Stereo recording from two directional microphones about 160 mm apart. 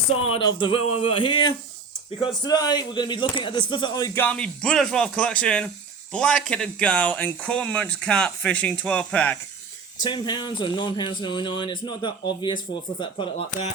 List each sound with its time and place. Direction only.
0.3 s a man's voice: 30° left (ahead or behind)
4.1 s speech: 10° left (ahead or behind)
10.0 s speech: 30° left (ahead or behind)